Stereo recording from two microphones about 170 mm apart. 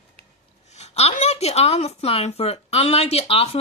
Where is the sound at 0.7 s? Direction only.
40° left (ahead or behind).